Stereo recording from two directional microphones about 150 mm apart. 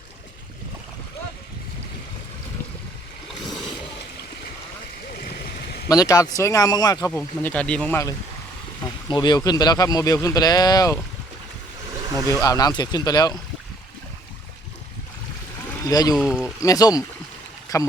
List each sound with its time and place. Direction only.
5.1 s boat: 90° left
5.9 s speech: 25° left (ahead or behind)
7.1 s speech: 10° left (ahead or behind)
8.8 s speech: 30° left (ahead or behind)
12.3 s speech: 25° left (ahead or behind)
15.6 s a sound: 20° left (ahead or behind)
16.1 s speech: 5° left (ahead or behind)
16.6 s speech: 25° left (ahead or behind)